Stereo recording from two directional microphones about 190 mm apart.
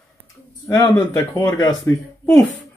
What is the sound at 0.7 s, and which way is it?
A man's voice, 15° left (ahead or behind).